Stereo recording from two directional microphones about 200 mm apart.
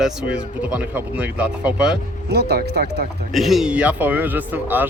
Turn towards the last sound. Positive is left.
turn(degrees=-10)  # may be behind; listen again after turning